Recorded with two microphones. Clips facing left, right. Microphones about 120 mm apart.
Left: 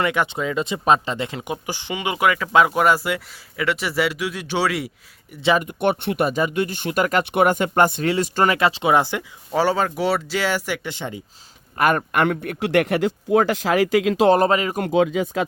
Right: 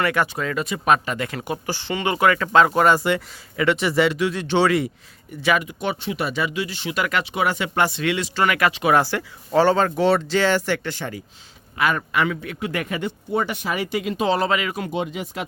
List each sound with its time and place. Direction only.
0.0 s speech: 20° left (ahead or behind)
5.4 s speech: 25° left (ahead or behind)
5.6 s speech: 55° left (ahead or behind)
7.3 s speech: 55° left (ahead or behind)
8.5 s speech: 25° left (ahead or behind)
11.8 s speech: 50° left (ahead or behind)
12.5 s speech: 75° left (ahead or behind); by 14.3 s 90° left
14.3 s speech: 45° left (ahead or behind)
14.8 s speech: 75° left (ahead or behind)